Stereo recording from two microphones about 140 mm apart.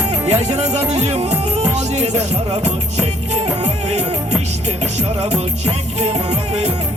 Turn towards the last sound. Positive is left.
turn(degrees=-50)  # may be behind; listen again after turning